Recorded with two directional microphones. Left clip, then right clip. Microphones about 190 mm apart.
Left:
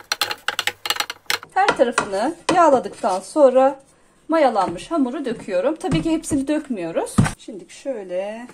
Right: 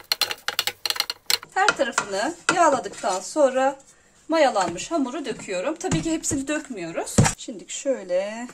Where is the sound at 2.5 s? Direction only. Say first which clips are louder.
Left 5 dB; 15° left (ahead or behind).